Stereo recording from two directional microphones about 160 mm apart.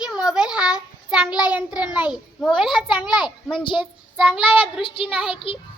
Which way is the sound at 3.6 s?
30° left (ahead or behind).